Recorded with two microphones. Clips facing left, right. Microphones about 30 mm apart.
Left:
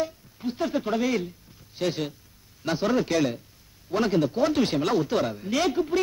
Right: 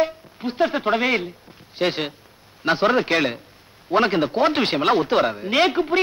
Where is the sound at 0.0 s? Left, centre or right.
Right.